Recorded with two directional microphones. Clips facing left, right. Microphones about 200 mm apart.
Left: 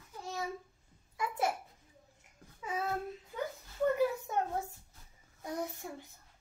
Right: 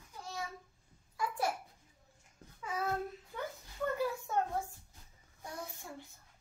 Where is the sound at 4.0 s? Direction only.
20° left (ahead or behind).